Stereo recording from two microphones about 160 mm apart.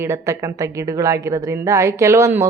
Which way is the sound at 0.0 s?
20° right (ahead or behind).